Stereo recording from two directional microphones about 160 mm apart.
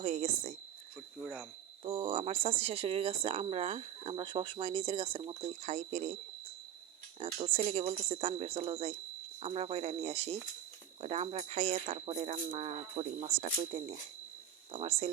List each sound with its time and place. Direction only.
0.0 s a sound: 40° right (ahead or behind)
1.2 s cricket: 5° right (ahead or behind)
1.8 s speech: 35° right (ahead or behind)
7.2 s speech: 40° right (ahead or behind)